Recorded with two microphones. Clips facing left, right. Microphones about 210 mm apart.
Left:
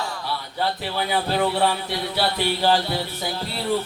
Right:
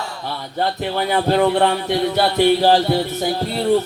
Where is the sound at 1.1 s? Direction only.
50° right (ahead or behind).